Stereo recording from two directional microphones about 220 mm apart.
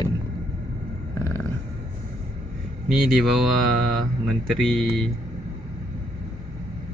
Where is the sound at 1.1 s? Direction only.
15° left (ahead or behind).